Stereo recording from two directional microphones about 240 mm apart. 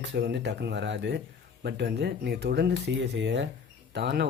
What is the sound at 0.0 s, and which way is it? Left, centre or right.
Speech, right.